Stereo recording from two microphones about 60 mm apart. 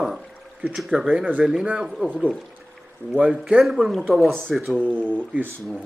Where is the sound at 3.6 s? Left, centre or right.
Centre.